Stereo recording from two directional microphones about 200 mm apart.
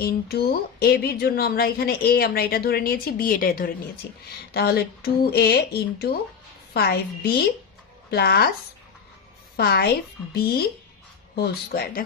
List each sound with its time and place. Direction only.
0.0 s speech: 50° left (ahead or behind)
9.6 s speech: 50° left (ahead or behind)